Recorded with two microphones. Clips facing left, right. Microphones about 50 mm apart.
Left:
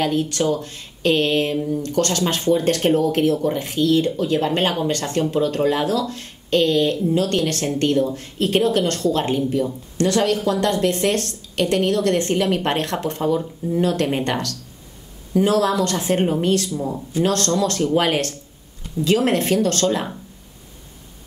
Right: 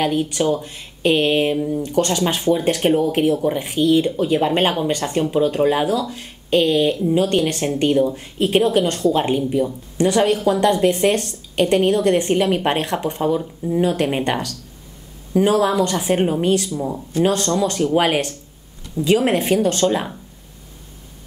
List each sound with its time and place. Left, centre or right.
0.0 s speech: centre